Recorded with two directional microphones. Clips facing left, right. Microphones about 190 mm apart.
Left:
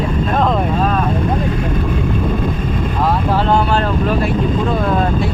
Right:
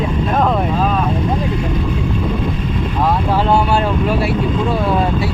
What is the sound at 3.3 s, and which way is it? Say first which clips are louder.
Speech: right 1 dB; 10° right (ahead or behind).